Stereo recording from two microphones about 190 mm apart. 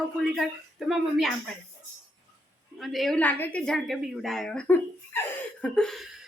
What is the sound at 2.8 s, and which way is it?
A woman's voice, centre (ahead or behind).